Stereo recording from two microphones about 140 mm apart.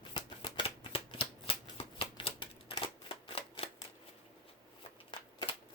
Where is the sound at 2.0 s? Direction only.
40° left (ahead or behind).